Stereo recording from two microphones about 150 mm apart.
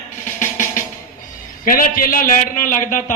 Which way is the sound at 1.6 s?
65° left (ahead or behind).